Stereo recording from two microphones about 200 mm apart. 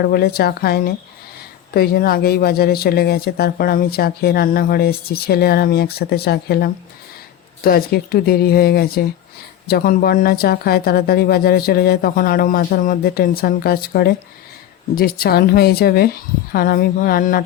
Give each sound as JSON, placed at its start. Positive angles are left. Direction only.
{"t": 0.0, "sound": "speech", "side_deg": 50}